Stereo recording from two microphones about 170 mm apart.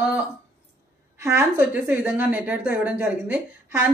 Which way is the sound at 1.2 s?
15° right (ahead or behind).